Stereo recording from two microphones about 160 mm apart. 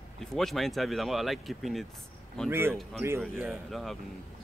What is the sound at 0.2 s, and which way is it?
Speech, 5° left (ahead or behind).